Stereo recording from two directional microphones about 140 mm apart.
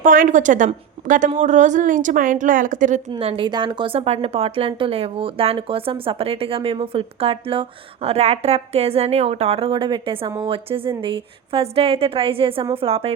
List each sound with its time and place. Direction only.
0.0 s a woman's voice: 75° right (ahead or behind)
3.1 s a woman's voice: 40° right (ahead or behind)